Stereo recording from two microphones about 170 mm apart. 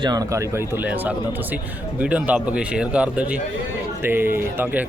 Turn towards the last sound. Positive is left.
turn(degrees=-15)  # may be behind; listen again after turning